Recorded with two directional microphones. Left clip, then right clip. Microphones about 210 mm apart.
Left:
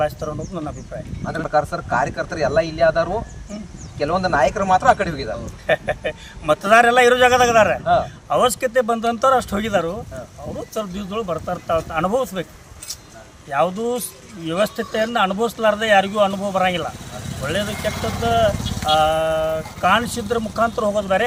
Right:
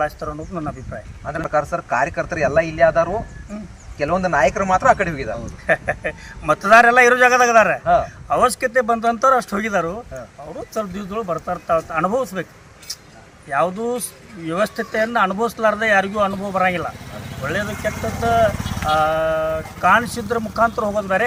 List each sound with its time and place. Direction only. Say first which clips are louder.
0.0 s speech: left 1 dB; 5° right (ahead or behind)
1.3 s speech: even; 25° right (ahead or behind)
5.6 s speech: even; centre (ahead or behind)
13.5 s speech: even; centre (ahead or behind)